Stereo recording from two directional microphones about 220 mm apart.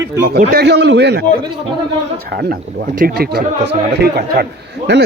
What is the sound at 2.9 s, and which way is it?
A man's voice, 45° right (ahead or behind).